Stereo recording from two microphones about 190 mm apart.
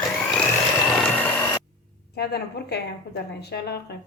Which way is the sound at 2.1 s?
55° left (ahead or behind).